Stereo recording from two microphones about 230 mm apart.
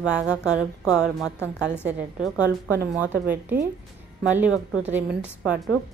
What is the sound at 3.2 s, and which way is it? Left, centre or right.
A woman's voice, centre.